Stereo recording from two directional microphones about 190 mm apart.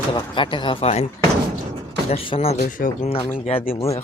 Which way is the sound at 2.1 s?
30° left (ahead or behind).